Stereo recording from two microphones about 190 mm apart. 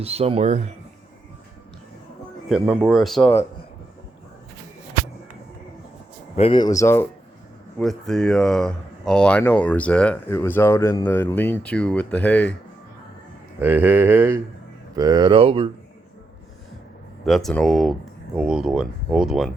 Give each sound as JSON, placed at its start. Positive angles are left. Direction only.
{"t": 0.0, "sound": "speech", "side_deg": -30}
{"t": 2.5, "sound": "speech", "side_deg": -5}
{"t": 6.3, "sound": "speech", "side_deg": 30}
{"t": 7.8, "sound": "speech", "side_deg": 0}
{"t": 13.6, "sound": "speech", "side_deg": -10}
{"t": 17.2, "sound": "speech", "side_deg": 0}